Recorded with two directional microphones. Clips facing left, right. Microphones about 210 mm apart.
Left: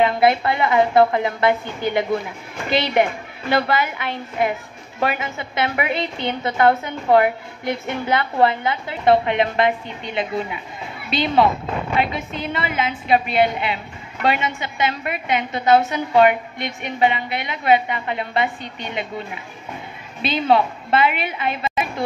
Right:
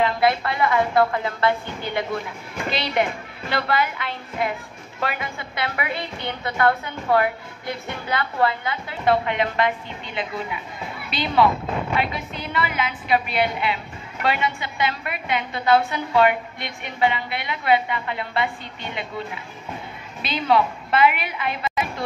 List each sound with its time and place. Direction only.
0.0 s a woman's voice: 25° left (ahead or behind)